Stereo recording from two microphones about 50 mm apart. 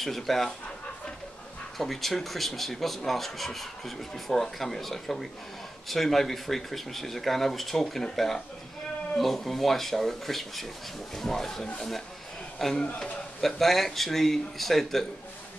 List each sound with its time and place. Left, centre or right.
0.0 s speech: centre
1.8 s speech: centre
12.7 s a man's voice: left
13.4 s speech: centre